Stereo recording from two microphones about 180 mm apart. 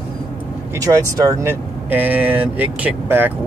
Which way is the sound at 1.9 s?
10° right (ahead or behind).